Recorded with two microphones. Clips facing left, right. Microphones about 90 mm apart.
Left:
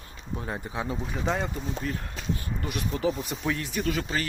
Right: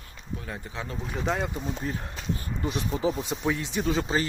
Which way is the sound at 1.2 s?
Centre (ahead or behind).